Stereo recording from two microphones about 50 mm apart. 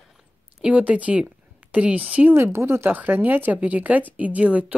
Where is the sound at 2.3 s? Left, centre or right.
Right.